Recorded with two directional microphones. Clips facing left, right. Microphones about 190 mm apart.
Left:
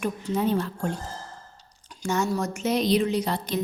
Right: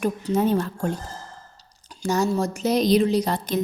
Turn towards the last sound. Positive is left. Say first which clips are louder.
# right 4 dB
turn(degrees=-45)  # may be behind; listen again after turning